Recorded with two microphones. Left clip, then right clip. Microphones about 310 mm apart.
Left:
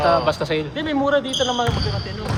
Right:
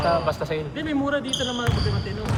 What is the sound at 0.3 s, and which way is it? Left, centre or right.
Speech, left.